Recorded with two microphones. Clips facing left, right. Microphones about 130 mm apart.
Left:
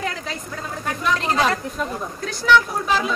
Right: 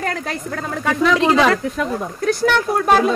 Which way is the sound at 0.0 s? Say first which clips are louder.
Right 4 dB; 55° right (ahead or behind).